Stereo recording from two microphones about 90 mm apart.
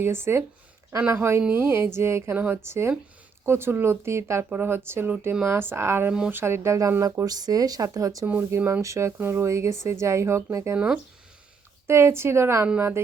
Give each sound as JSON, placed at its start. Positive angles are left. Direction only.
{"t": 0.0, "sound": "a woman's voice", "side_deg": -30}
{"t": 6.1, "sound": "speech", "side_deg": -10}
{"t": 6.3, "sound": "a woman's voice", "side_deg": -30}
{"t": 8.3, "sound": "a woman's voice", "side_deg": -25}
{"t": 10.8, "sound": "speech", "side_deg": -15}
{"t": 11.9, "sound": "a woman's voice", "side_deg": -30}